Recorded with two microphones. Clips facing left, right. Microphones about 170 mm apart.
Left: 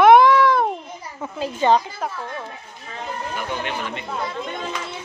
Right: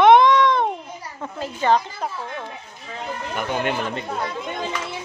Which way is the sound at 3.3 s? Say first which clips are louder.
Right 6 dB; 50° right (ahead or behind).